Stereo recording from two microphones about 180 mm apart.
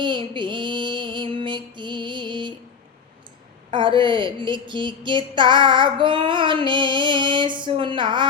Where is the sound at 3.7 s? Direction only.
25° right (ahead or behind).